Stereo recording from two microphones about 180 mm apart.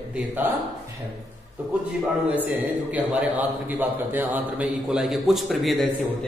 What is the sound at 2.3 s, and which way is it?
A man's voice, 10° right (ahead or behind).